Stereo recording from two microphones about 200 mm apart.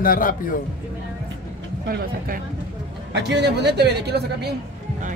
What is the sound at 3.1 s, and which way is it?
Speech, 60° right (ahead or behind).